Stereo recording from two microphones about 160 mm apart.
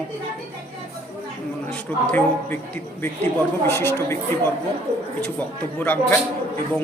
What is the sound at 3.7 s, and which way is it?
Speech, 15° left (ahead or behind).